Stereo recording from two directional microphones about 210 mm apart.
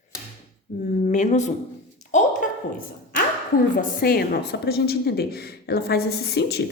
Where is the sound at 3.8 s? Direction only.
45° left (ahead or behind).